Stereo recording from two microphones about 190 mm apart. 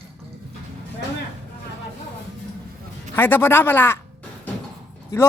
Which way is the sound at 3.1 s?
10° left (ahead or behind).